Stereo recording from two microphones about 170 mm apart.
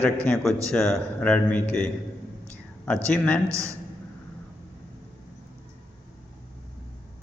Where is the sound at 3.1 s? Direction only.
5° left (ahead or behind).